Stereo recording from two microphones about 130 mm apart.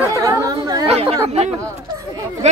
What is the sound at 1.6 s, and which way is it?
Speech, 25° right (ahead or behind).